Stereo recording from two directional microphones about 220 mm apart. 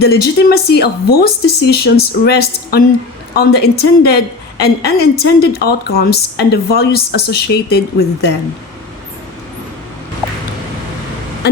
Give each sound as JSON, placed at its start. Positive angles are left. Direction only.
{"t": 0.0, "sound": "a woman's voice", "side_deg": 45}